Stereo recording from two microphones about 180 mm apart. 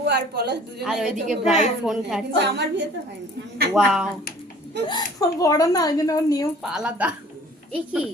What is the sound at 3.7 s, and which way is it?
Speech, centre (ahead or behind).